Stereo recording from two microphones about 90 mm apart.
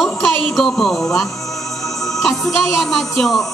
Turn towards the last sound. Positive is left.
turn(degrees=5)  # may be behind; listen again after turning